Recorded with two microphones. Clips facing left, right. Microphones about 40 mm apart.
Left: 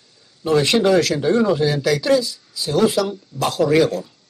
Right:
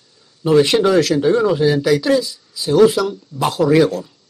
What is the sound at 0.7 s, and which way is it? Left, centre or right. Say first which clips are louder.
Speech: right 2 dB; centre.